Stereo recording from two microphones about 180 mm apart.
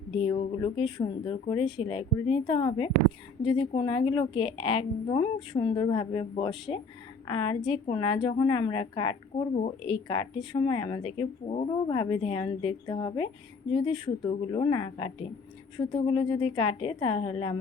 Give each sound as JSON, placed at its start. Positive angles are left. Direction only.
{"t": 0.2, "sound": "a woman's voice", "side_deg": 25}